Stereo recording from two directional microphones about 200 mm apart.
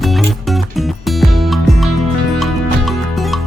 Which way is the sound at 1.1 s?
Centre (ahead or behind).